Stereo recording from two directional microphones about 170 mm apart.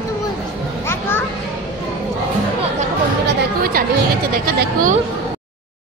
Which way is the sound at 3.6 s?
60° right (ahead or behind).